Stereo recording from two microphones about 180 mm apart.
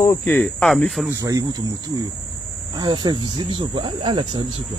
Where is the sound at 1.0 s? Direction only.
20° right (ahead or behind).